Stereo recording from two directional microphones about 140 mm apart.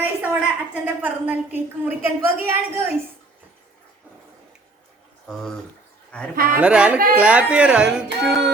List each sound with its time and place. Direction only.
0.2 s a sound: 10° right (ahead or behind)
0.9 s speech: 10° right (ahead or behind)
6.3 s a man's voice: 90° right
6.6 s speech: 10° right (ahead or behind)